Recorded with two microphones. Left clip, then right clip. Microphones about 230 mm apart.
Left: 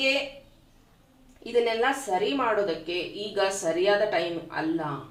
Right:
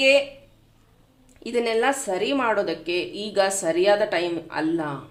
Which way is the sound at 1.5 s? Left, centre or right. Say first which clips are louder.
Right 2 dB; right.